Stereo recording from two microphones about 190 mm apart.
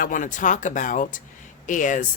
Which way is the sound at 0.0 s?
45° left (ahead or behind).